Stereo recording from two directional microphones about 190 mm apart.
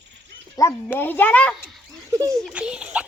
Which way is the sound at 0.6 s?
10° left (ahead or behind).